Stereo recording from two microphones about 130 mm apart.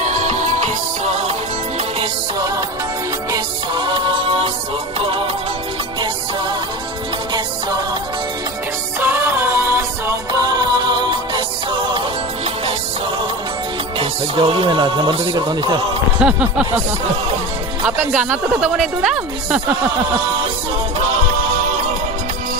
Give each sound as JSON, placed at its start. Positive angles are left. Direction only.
{"t": 0.0, "sound": "music", "side_deg": -70}
{"t": 1.0, "sound": "music", "side_deg": -60}
{"t": 3.3, "sound": "music", "side_deg": -35}
{"t": 9.0, "sound": "music", "side_deg": -20}
{"t": 10.6, "sound": "music", "side_deg": -35}
{"t": 13.9, "sound": "music", "side_deg": -45}
{"t": 15.3, "sound": "a man's voice", "side_deg": -35}
{"t": 16.2, "sound": "speech", "side_deg": -10}
{"t": 17.8, "sound": "speech", "side_deg": -10}